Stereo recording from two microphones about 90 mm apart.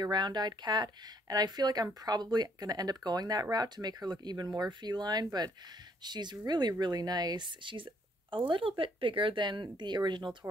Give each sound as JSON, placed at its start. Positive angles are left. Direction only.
{"t": 0.0, "sound": "speech", "side_deg": -55}